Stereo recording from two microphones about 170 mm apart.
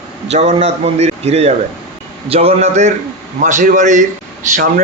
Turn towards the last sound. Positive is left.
turn(degrees=-45)  # may be behind; listen again after turning